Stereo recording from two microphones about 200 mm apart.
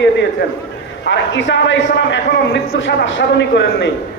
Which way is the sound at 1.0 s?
60° left (ahead or behind).